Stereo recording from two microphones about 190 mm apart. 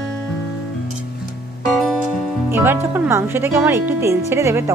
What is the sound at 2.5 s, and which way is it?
Speech, 10° right (ahead or behind).